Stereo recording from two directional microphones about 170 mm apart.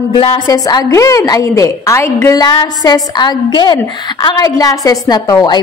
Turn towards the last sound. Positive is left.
turn(degrees=20)  # may be behind; listen again after turning